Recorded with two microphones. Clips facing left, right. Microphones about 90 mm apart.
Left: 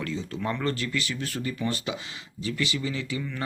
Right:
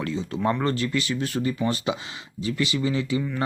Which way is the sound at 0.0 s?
20° right (ahead or behind).